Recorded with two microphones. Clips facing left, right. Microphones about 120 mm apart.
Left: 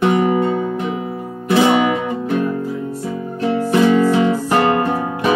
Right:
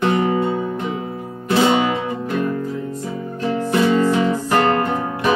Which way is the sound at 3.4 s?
20° left (ahead or behind).